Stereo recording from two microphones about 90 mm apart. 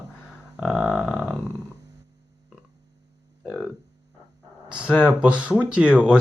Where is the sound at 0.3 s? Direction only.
5° right (ahead or behind).